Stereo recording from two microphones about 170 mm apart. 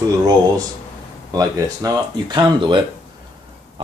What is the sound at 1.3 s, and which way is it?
Speech, 20° right (ahead or behind).